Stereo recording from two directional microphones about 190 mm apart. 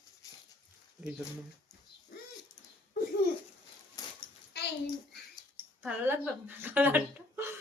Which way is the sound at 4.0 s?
20° left (ahead or behind).